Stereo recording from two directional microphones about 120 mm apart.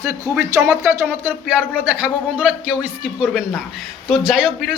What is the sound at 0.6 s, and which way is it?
A man's voice, 25° right (ahead or behind).